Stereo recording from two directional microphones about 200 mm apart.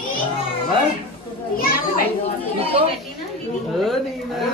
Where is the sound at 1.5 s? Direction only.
45° left (ahead or behind).